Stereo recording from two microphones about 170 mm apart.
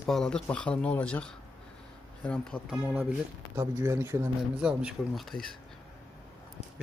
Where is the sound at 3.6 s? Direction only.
20° right (ahead or behind).